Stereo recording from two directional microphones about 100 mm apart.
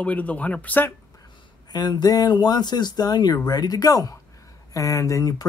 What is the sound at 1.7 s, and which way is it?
Speech, 45° left (ahead or behind).